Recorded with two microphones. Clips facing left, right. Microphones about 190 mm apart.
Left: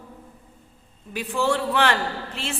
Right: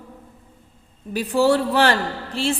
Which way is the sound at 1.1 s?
35° right (ahead or behind).